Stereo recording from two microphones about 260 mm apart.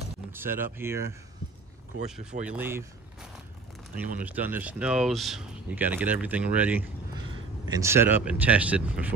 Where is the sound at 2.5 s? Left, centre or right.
Centre.